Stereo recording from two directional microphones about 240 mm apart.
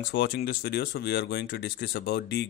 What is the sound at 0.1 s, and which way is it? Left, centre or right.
Speech, left.